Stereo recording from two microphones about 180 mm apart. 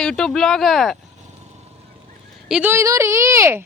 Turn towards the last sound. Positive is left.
turn(degrees=-15)  # may be behind; listen again after turning